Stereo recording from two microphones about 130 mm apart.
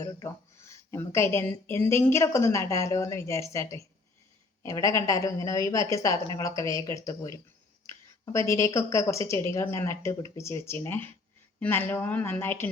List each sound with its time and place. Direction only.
0.0 s speech: 20° left (ahead or behind)